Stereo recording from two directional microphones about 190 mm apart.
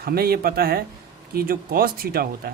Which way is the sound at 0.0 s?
55° right (ahead or behind).